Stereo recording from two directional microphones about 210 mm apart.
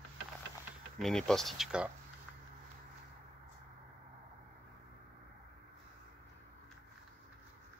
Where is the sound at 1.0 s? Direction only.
5° left (ahead or behind).